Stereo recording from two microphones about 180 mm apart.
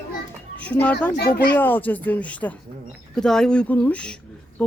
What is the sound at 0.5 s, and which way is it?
Speech, 10° left (ahead or behind).